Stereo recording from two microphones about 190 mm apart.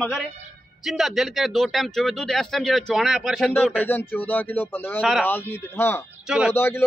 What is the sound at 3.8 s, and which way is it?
A man's voice, 10° left (ahead or behind).